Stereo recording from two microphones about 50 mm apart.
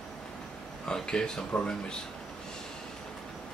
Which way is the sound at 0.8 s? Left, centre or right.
Centre.